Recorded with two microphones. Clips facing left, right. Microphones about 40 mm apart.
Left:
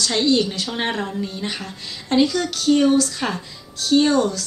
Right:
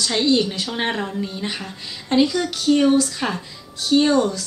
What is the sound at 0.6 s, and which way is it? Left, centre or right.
A woman's voice, centre.